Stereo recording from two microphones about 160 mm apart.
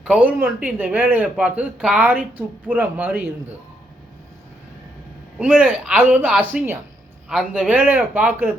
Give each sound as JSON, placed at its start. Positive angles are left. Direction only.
{"t": 0.0, "sound": "speech", "side_deg": -10}
{"t": 5.4, "sound": "a man's voice", "side_deg": -5}